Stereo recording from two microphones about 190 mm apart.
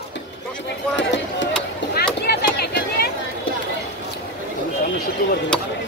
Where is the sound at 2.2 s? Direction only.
60° left (ahead or behind).